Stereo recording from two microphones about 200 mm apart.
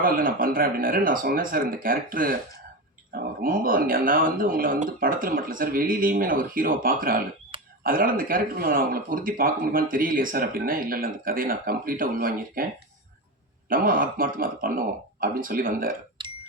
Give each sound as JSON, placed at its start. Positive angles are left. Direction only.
{"t": 0.0, "sound": "a man's voice", "side_deg": -45}
{"t": 7.5, "sound": "throat clearing", "side_deg": -25}
{"t": 7.9, "sound": "a man's voice", "side_deg": -45}
{"t": 13.7, "sound": "a man's voice", "side_deg": -45}